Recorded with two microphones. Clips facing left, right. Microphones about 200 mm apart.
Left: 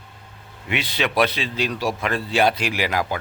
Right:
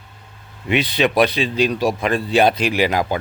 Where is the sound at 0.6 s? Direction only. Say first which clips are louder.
Right 7 dB; 20° right (ahead or behind).